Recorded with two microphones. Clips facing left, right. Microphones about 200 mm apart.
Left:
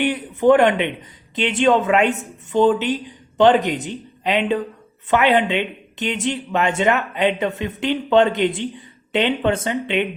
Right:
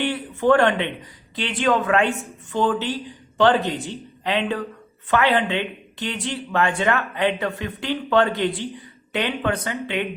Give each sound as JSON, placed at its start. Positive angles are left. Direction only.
{"t": 0.0, "sound": "speech", "side_deg": 20}